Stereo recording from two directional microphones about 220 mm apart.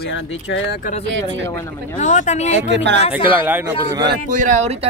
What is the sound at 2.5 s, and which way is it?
Speech, 55° right (ahead or behind).